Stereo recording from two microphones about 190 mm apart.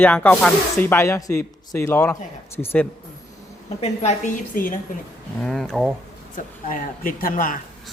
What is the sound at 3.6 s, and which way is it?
A woman's voice, 35° left (ahead or behind).